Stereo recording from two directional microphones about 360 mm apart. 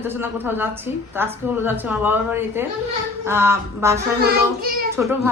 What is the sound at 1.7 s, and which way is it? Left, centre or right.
A man's voice, centre.